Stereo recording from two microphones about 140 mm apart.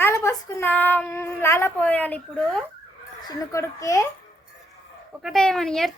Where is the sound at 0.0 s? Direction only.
20° left (ahead or behind).